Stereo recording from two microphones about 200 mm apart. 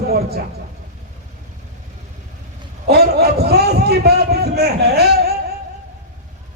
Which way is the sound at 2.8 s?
50° right (ahead or behind).